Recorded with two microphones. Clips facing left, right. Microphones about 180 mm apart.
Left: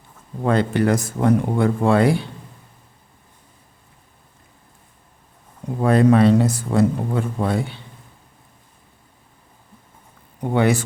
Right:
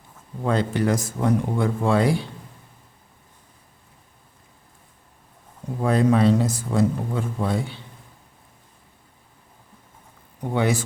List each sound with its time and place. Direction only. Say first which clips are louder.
0.4 s speech: left 4 dB; 65° left (ahead or behind)
5.8 s speech: left 4 dB; 65° left (ahead or behind)
10.4 s speech: left 4 dB; 60° left (ahead or behind)